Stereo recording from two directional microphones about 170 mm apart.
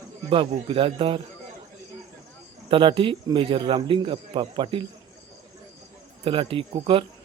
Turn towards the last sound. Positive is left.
turn(degrees=-30)  # may be behind; listen again after turning